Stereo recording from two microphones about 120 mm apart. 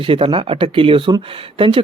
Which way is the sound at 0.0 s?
45° right (ahead or behind).